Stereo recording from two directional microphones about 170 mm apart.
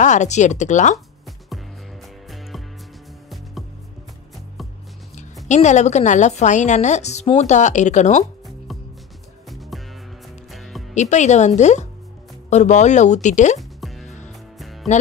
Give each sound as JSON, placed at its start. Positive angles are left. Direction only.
{"t": 0.0, "sound": "a woman's voice", "side_deg": 45}
{"t": 2.2, "sound": "music", "side_deg": 0}
{"t": 5.1, "sound": "a woman's voice", "side_deg": 45}
{"t": 9.5, "sound": "music", "side_deg": 0}
{"t": 11.0, "sound": "a woman's voice", "side_deg": 45}
{"t": 13.6, "sound": "music", "side_deg": 0}